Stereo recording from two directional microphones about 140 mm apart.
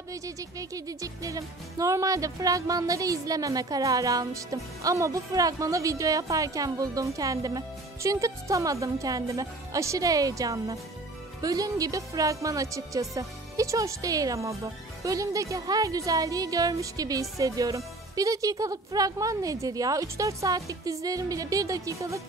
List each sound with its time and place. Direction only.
0.1 s speech: 25° right (ahead or behind)